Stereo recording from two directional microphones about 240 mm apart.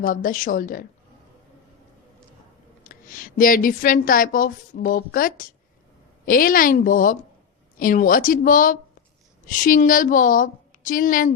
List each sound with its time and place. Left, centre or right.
0.0 s a woman's voice: left
2.8 s a woman's voice: left